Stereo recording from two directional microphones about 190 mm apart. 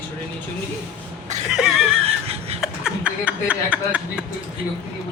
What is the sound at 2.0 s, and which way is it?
Laughter, 35° right (ahead or behind).